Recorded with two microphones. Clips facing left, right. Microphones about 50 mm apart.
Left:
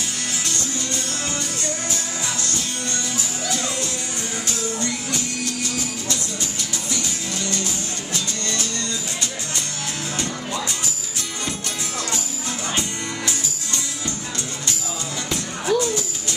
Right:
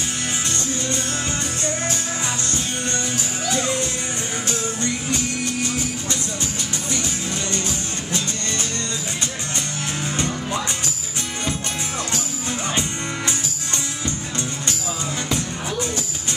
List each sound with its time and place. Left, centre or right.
3.4 s music: right
5.4 s music: right
7.6 s music: right
10.1 s music: right
15.2 s music: right